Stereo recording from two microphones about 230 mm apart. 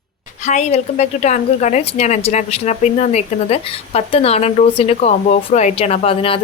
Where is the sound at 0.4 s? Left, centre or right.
Left.